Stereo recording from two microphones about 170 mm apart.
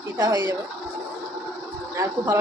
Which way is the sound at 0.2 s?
20° right (ahead or behind).